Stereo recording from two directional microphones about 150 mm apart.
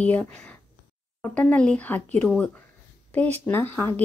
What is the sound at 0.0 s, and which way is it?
A woman's voice, 10° left (ahead or behind).